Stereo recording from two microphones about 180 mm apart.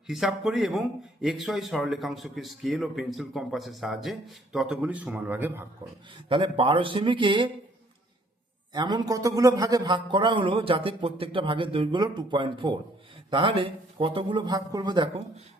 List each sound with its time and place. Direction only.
0.1 s speech: centre (ahead or behind)
6.2 s a man's voice: 30° right (ahead or behind)
8.7 s a man's voice: 25° right (ahead or behind)